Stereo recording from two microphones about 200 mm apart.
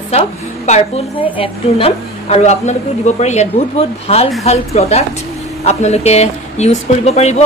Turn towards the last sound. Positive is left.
turn(degrees=35)  # may be behind; listen again after turning